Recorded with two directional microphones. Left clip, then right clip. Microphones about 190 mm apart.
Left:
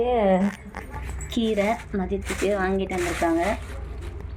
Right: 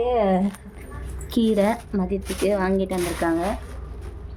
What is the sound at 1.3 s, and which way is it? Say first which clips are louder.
A woman's voice: right 3 dB; 25° right (ahead or behind).